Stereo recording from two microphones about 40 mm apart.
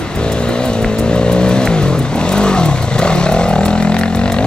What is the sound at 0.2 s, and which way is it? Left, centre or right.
Vehicle, left.